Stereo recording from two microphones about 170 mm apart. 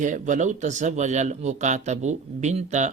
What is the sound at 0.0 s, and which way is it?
Speech, 45° right (ahead or behind).